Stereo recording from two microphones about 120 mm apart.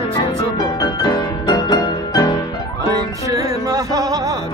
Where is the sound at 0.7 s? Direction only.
35° left (ahead or behind).